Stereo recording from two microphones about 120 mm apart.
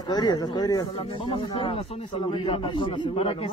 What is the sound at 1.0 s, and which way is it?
A man's voice, 45° left (ahead or behind).